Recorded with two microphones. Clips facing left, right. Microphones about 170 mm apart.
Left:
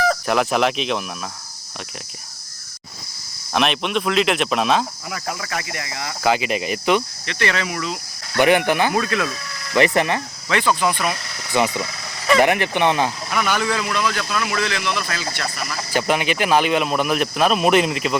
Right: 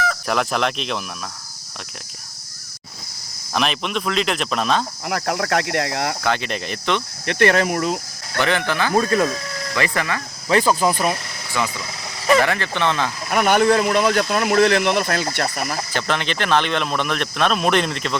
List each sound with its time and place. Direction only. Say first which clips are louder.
0.3 s speech: right 1 dB; 5° left (ahead or behind)
3.5 s speech: left 2 dB; centre (ahead or behind)
5.0 s speech: right 6 dB; 65° right (ahead or behind)
6.2 s speech: left 3 dB; 5° left (ahead or behind)
7.3 s speech: right 10 dB; 55° right (ahead or behind)
8.4 s speech: left 5 dB; 15° left (ahead or behind)
9.0 s speech: right 4 dB; 40° right (ahead or behind)
9.7 s speech: left 6 dB; 20° left (ahead or behind)
10.5 s speech: right 3 dB; 35° right (ahead or behind)
11.6 s speech: left 5 dB; 20° left (ahead or behind)
13.3 s speech: right 9 dB; 55° right (ahead or behind)
15.9 s speech: left 9 dB; 10° left (ahead or behind)